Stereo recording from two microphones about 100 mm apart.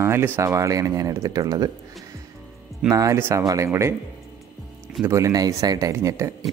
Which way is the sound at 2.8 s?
30° right (ahead or behind).